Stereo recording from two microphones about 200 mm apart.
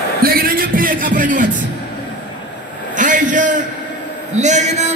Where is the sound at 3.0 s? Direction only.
40° right (ahead or behind).